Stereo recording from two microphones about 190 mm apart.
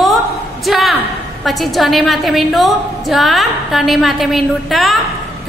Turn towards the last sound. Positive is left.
turn(degrees=0)  # may be behind; listen again after turning